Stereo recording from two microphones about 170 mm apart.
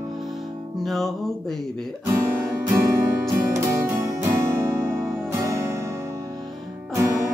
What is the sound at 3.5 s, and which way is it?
Music, 15° right (ahead or behind).